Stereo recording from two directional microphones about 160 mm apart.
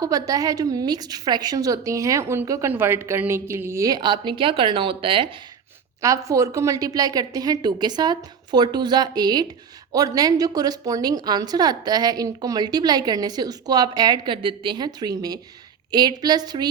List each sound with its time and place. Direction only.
0.0 s a woman's voice: 20° right (ahead or behind)
6.0 s a woman's voice: 20° right (ahead or behind)